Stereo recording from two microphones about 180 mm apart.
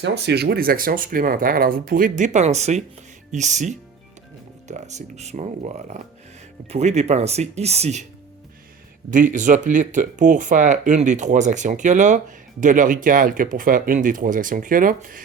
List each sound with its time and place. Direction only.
0.0 s speech: 70° right (ahead or behind); by 8.0 s 35° right (ahead or behind)
9.0 s speech: 45° right (ahead or behind)